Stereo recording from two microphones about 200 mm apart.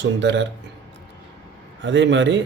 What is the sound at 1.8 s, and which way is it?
Speech, 65° right (ahead or behind).